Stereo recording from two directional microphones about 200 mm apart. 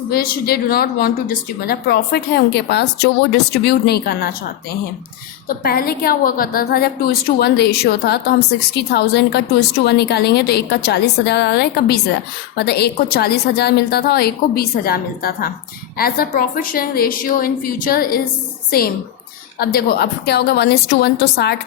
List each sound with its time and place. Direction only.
0.1 s a woman's voice: 50° left (ahead or behind)
5.6 s a woman's voice: 50° left (ahead or behind)
19.5 s a woman's voice: 50° left (ahead or behind)